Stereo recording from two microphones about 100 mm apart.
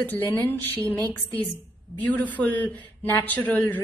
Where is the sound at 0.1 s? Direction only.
20° left (ahead or behind).